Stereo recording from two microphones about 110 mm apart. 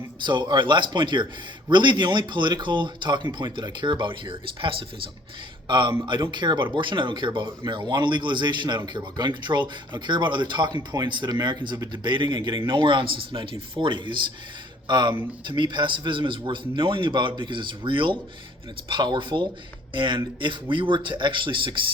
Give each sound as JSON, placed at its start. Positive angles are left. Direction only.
{"t": 0.2, "sound": "a man's voice", "side_deg": -45}